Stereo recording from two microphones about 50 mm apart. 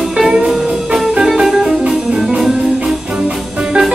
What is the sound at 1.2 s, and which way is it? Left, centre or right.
Music, centre.